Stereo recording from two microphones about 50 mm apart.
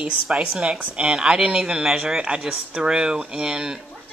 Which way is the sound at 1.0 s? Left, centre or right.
Centre.